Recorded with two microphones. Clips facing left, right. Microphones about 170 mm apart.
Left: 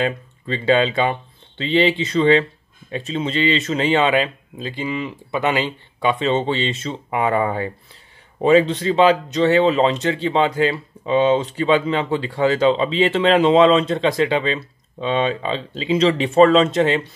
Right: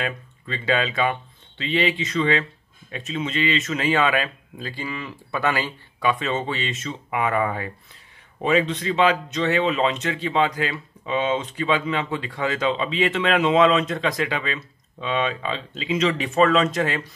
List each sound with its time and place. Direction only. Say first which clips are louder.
0.0 s speech: left 7 dB; 30° left (ahead or behind)